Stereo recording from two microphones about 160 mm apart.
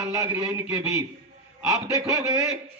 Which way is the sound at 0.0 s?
20° right (ahead or behind).